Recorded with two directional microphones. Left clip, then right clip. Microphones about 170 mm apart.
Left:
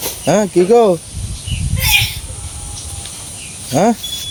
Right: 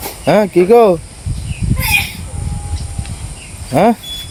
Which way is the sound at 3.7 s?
5° right (ahead or behind).